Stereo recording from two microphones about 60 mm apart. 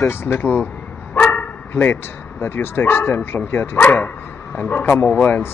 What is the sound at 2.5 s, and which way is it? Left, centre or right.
Speech, left.